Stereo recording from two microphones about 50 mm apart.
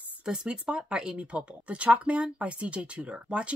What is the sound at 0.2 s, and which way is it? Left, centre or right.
Speech, centre.